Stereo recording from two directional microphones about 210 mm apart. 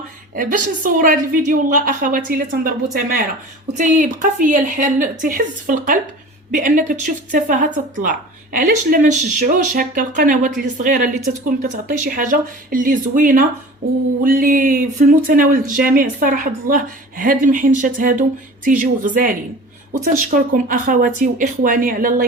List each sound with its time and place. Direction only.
0.3 s speech: 40° right (ahead or behind)
3.8 s speech: 35° right (ahead or behind)
13.8 s a sound: 45° right (ahead or behind)
14.3 s speech: 40° right (ahead or behind)